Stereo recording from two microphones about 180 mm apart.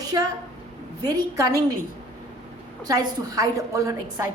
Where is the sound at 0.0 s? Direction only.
20° right (ahead or behind).